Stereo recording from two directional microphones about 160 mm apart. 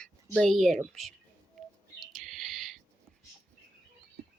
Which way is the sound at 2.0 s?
Centre (ahead or behind).